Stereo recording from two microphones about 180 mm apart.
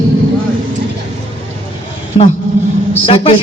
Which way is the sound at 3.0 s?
30° left (ahead or behind).